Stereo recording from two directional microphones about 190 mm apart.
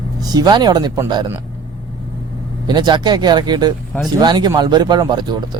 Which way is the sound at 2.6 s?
25° right (ahead or behind).